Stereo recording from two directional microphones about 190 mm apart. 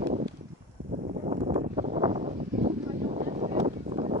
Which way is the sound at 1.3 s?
35° right (ahead or behind).